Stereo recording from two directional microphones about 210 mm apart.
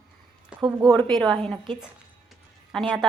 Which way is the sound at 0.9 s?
5° left (ahead or behind).